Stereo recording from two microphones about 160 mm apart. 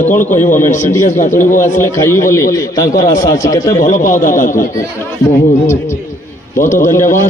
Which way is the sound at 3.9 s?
55° left (ahead or behind).